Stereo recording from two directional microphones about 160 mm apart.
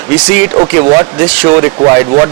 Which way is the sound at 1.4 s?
15° right (ahead or behind).